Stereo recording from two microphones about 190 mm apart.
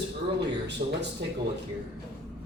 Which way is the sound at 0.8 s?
40° right (ahead or behind).